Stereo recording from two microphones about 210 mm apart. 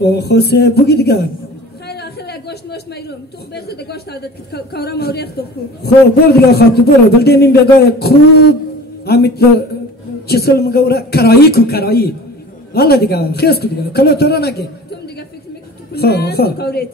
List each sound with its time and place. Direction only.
0.0 s speech: 50° left (ahead or behind)
6.5 s speech: 50° left (ahead or behind)